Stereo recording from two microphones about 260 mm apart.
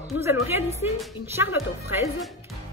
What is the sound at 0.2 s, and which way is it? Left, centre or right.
Speech, centre.